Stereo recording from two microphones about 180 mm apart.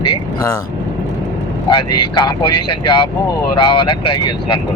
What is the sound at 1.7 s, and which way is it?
Speech, 25° left (ahead or behind).